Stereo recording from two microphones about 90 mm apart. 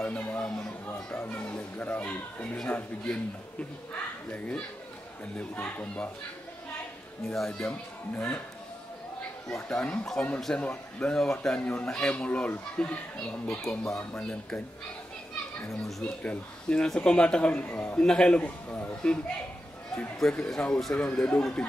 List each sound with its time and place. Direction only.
0.0 s speech: 15° left (ahead or behind)
7.2 s speech: 5° left (ahead or behind)
9.5 s speech: 10° left (ahead or behind)
13.6 s speech: 35° left (ahead or behind)
13.9 s speech: 10° left (ahead or behind)
16.0 s speech: 15° left (ahead or behind)
20.2 s speech: 10° left (ahead or behind)